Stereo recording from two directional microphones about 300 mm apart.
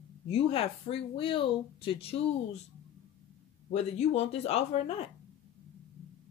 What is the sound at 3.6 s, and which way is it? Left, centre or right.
Speech, left.